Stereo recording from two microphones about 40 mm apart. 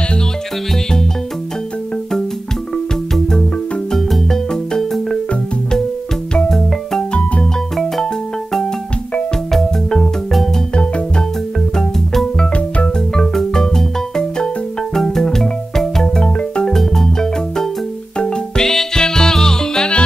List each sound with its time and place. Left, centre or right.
3.9 s music: centre
7.7 s music: centre
9.5 s music: centre
12.1 s music: centre
12.5 s music: left
13.1 s music: centre